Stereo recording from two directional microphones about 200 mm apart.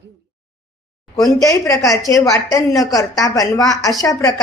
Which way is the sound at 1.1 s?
20° left (ahead or behind).